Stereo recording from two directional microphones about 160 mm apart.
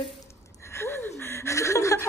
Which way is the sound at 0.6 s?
15° left (ahead or behind).